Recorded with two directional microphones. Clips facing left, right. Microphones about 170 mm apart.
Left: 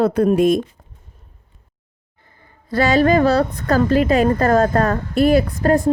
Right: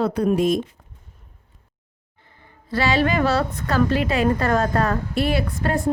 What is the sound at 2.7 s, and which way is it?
A woman's voice, 45° left (ahead or behind).